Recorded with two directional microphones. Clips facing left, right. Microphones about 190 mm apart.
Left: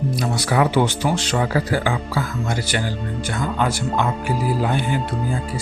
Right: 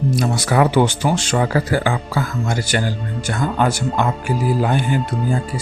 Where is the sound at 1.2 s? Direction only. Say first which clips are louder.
Right 2 dB; 50° right (ahead or behind).